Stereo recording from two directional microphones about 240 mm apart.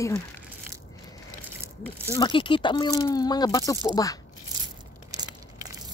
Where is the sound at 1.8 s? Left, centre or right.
Centre.